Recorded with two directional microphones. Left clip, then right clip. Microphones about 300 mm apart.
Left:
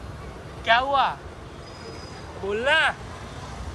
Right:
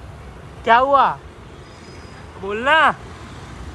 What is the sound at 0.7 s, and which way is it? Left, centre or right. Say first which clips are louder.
Speech: right 7 dB; centre.